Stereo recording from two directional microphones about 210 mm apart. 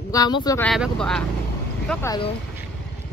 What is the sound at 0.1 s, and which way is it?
Speech, 20° left (ahead or behind).